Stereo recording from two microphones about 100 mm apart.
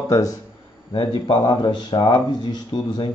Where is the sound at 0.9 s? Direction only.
60° left (ahead or behind).